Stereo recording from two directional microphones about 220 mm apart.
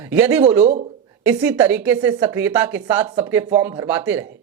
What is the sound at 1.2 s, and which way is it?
Speech, 5° right (ahead or behind).